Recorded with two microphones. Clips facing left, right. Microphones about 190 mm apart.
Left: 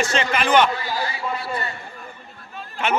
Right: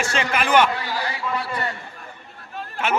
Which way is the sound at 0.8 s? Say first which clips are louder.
Left 1 dB; 70° right (ahead or behind).